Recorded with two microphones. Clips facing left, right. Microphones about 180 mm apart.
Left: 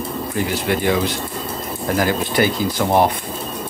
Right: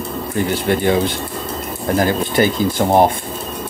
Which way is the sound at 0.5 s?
30° right (ahead or behind).